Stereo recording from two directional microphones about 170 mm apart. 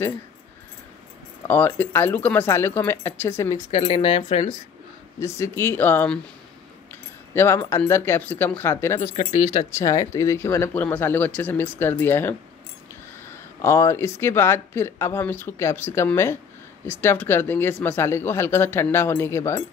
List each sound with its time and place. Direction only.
1.5 s speech: 10° left (ahead or behind)
3.5 s speech: 40° left (ahead or behind)
5.2 s speech: 15° left (ahead or behind)
7.3 s speech: 15° left (ahead or behind)
9.0 s speech: 45° left (ahead or behind)
9.7 s speech: 20° left (ahead or behind)
13.6 s speech: 15° left (ahead or behind)